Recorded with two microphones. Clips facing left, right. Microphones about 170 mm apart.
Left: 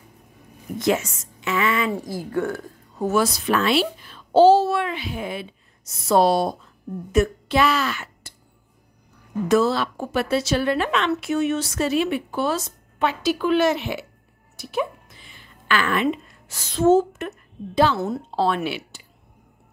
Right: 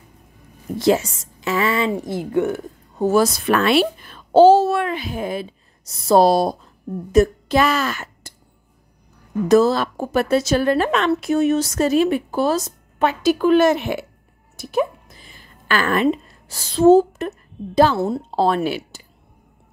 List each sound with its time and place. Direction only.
0.7 s a woman's voice: 30° right (ahead or behind)
1.9 s speech: 20° right (ahead or behind)
3.3 s a woman's voice: 60° right (ahead or behind)
9.5 s a woman's voice: 40° right (ahead or behind)